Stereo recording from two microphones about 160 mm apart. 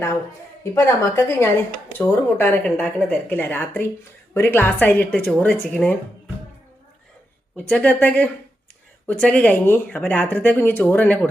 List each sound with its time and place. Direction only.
0.6 s speech: 20° left (ahead or behind)
7.5 s speech: 10° left (ahead or behind)